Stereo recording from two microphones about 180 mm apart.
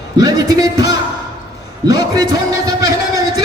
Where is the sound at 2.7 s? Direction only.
20° right (ahead or behind).